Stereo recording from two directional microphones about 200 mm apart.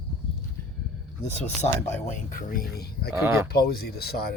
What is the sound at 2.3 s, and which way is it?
Speech, 45° left (ahead or behind).